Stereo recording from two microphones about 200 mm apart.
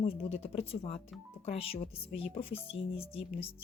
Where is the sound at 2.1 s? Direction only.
5° right (ahead or behind).